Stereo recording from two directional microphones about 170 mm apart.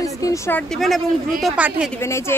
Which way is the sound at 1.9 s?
15° left (ahead or behind).